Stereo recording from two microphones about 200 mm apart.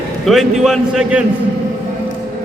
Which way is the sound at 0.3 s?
Centre (ahead or behind).